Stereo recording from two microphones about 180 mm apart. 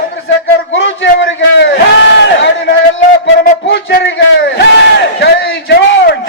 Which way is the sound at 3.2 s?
75° left (ahead or behind).